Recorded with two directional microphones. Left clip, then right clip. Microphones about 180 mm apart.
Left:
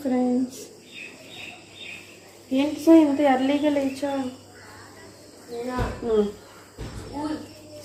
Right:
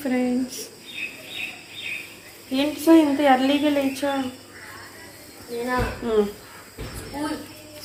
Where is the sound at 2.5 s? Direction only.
10° right (ahead or behind).